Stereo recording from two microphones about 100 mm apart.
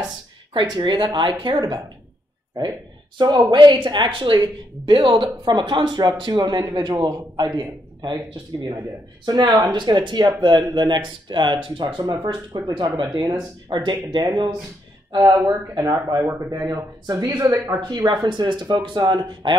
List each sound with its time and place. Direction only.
0.5 s speech: 50° right (ahead or behind)
3.2 s speech: 50° right (ahead or behind)
12.6 s speech: 40° right (ahead or behind)
12.9 s speech: 55° right (ahead or behind)
13.2 s speech: 45° right (ahead or behind); by 16.5 s 30° right (ahead or behind)
17.0 s speech: 40° right (ahead or behind)